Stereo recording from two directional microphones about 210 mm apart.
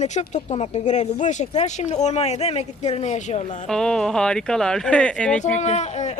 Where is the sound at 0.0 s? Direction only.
35° left (ahead or behind).